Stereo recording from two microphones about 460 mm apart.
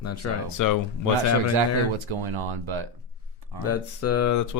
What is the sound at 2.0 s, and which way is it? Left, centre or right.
Speech, right.